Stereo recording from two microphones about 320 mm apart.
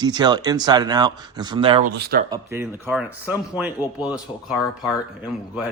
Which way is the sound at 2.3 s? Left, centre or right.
Centre.